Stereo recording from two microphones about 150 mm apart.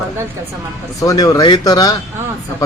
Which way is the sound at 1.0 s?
20° left (ahead or behind).